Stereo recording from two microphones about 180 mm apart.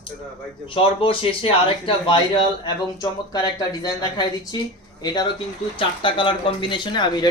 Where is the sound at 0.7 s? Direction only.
30° left (ahead or behind).